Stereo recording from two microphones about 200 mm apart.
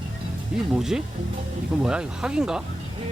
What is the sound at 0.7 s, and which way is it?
Speech, centre (ahead or behind).